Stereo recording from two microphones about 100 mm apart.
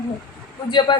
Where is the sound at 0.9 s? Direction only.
50° left (ahead or behind).